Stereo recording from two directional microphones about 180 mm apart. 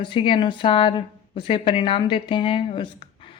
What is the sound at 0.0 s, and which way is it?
Speech, 30° left (ahead or behind).